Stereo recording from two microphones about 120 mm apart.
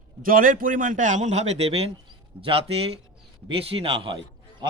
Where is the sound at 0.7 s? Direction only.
90° right.